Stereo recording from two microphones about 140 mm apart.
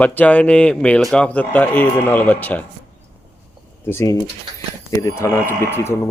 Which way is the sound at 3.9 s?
20° left (ahead or behind).